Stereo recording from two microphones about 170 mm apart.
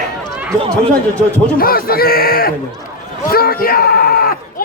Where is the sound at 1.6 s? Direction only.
60° left (ahead or behind).